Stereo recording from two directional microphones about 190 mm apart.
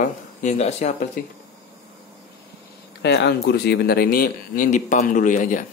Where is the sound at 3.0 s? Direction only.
65° left (ahead or behind).